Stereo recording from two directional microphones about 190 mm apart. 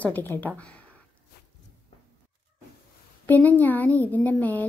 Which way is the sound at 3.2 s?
10° left (ahead or behind).